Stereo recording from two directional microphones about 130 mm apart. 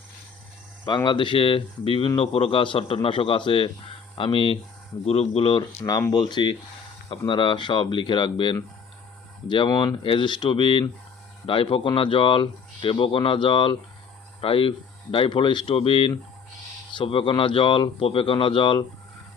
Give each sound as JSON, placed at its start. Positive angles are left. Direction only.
{"t": 0.9, "sound": "speech", "side_deg": 35}